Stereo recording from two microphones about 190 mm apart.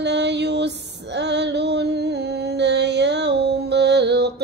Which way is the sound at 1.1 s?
65° right (ahead or behind).